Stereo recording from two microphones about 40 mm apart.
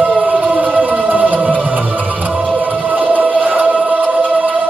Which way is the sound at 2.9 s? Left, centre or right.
Right.